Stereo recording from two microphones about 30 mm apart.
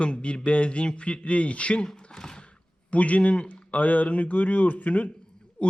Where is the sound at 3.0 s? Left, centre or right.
Left.